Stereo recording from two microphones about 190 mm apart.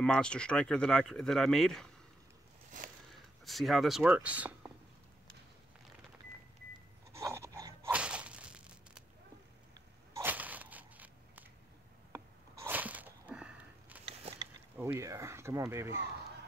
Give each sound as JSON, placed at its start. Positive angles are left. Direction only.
{"t": 0.0, "sound": "speech", "side_deg": 5}
{"t": 3.4, "sound": "speech", "side_deg": 0}
{"t": 7.1, "sound": "a sound", "side_deg": -15}
{"t": 7.9, "sound": "whip", "side_deg": -5}
{"t": 10.1, "sound": "a sound", "side_deg": -10}
{"t": 14.4, "sound": "speech", "side_deg": -15}